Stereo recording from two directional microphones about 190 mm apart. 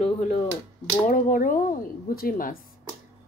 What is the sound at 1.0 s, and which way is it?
Speech, 45° left (ahead or behind).